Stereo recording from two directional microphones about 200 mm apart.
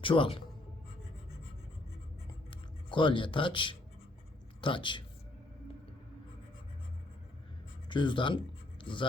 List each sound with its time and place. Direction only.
0.0 s speech: 25° left (ahead or behind)
2.5 s speech: 25° left (ahead or behind)
7.9 s speech: 25° left (ahead or behind)